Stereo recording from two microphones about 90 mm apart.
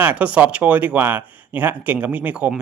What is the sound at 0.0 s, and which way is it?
Speech, 15° right (ahead or behind).